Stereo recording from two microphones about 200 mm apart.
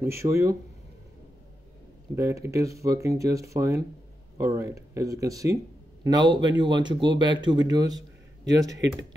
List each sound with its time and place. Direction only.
0.0 s speech: 15° right (ahead or behind)
2.1 s speech: 15° right (ahead or behind)